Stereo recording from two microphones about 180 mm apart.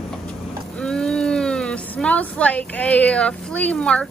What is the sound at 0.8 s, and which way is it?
Speech, 5° left (ahead or behind).